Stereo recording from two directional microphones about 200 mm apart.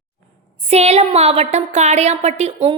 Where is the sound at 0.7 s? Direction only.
30° right (ahead or behind).